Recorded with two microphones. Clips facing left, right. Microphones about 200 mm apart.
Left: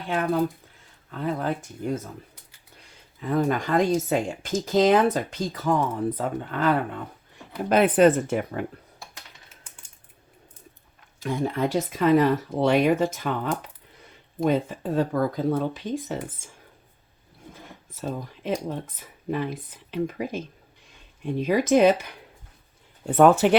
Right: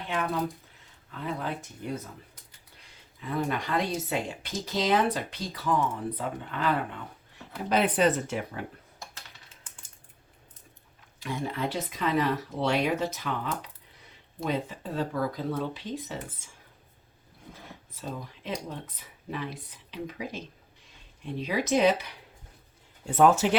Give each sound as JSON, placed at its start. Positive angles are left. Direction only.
{"t": 0.1, "sound": "speech", "side_deg": 45}
{"t": 3.2, "sound": "speech", "side_deg": 45}
{"t": 11.2, "sound": "speech", "side_deg": 45}
{"t": 17.9, "sound": "speech", "side_deg": 50}